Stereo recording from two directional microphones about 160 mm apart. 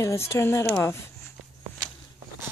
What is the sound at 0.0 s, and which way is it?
Speech, 15° left (ahead or behind).